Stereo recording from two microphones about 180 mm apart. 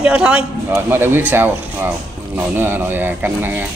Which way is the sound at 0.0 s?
5° right (ahead or behind).